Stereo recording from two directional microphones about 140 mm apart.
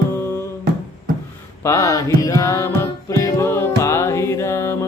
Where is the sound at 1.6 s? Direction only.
20° left (ahead or behind).